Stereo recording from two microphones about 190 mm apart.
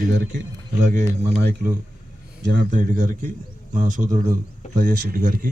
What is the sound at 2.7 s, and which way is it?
A man's voice, 45° right (ahead or behind).